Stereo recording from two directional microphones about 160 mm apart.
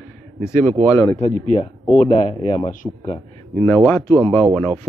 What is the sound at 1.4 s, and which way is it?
Speech, 50° left (ahead or behind).